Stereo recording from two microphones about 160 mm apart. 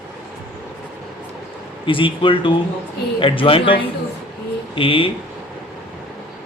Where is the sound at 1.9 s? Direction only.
30° left (ahead or behind).